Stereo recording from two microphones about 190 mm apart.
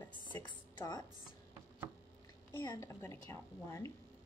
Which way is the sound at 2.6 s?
15° left (ahead or behind).